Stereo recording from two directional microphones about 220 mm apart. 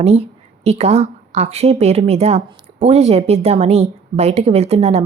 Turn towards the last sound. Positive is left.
turn(degrees=-30)  # may be behind; listen again after turning